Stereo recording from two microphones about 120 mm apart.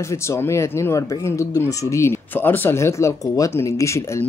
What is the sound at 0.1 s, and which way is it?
Speech, 25° left (ahead or behind).